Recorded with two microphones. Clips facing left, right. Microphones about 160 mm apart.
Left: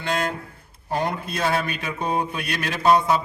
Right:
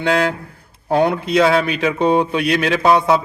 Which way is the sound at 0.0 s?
70° right (ahead or behind).